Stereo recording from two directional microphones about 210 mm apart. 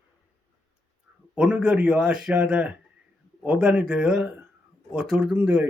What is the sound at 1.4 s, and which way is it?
Speech, 5° right (ahead or behind).